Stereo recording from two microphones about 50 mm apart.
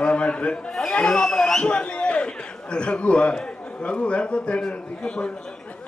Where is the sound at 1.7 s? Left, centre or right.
Left.